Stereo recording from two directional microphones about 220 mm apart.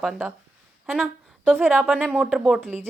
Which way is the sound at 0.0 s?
10° right (ahead or behind).